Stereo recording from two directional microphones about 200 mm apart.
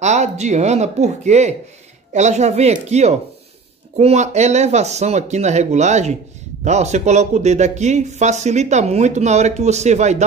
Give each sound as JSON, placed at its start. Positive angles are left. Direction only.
{"t": 0.0, "sound": "speech", "side_deg": -35}